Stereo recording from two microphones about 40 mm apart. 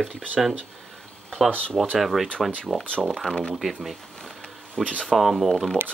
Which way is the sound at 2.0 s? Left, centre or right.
Centre.